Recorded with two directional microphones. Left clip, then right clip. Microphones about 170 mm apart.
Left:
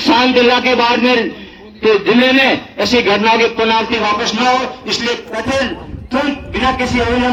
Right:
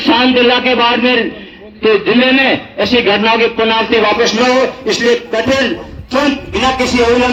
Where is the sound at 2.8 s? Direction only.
30° right (ahead or behind).